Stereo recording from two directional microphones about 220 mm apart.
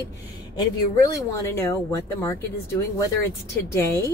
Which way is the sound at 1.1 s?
15° left (ahead or behind).